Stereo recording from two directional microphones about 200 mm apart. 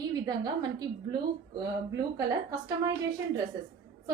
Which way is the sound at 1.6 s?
20° right (ahead or behind).